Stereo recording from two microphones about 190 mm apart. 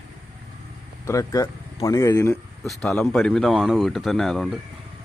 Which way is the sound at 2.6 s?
5° left (ahead or behind).